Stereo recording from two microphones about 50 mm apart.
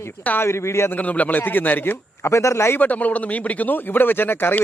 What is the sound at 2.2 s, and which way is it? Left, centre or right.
Speech, left.